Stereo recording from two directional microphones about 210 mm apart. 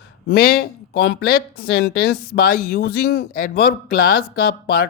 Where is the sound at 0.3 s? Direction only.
50° left (ahead or behind).